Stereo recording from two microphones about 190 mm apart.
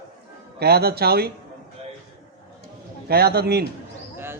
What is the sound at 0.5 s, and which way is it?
Speech, 55° right (ahead or behind).